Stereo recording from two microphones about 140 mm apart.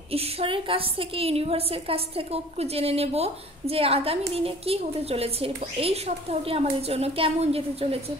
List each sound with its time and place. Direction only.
0.1 s a woman's voice: 45° right (ahead or behind)